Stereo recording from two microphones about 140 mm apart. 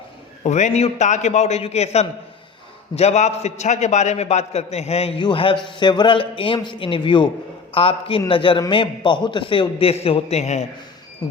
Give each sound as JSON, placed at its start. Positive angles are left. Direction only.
{"t": 0.4, "sound": "a man's voice", "side_deg": 55}
{"t": 5.1, "sound": "a man's voice", "side_deg": 35}
{"t": 11.2, "sound": "speech", "side_deg": 25}